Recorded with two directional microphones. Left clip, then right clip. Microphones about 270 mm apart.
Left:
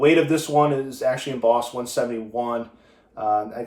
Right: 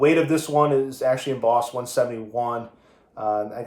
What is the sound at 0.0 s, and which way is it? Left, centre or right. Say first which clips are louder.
Speech: left 1 dB; centre.